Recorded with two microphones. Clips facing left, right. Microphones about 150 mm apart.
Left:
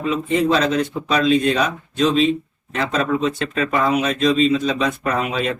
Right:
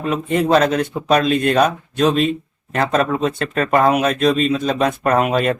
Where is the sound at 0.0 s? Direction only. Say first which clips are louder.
Even; 55° right (ahead or behind).